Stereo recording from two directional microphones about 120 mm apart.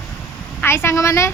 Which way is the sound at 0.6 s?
20° left (ahead or behind).